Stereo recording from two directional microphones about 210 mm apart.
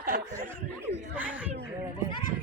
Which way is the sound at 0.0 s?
40° right (ahead or behind).